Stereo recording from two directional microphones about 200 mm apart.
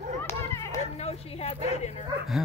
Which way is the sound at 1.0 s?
30° left (ahead or behind).